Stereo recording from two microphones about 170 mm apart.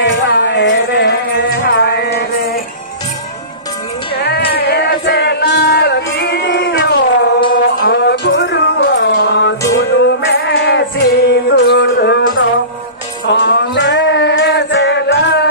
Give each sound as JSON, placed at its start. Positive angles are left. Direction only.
{"t": 0.0, "sound": "music", "side_deg": 90}
{"t": 4.2, "sound": "music", "side_deg": 70}
{"t": 7.5, "sound": "music", "side_deg": 65}
{"t": 13.3, "sound": "music", "side_deg": 90}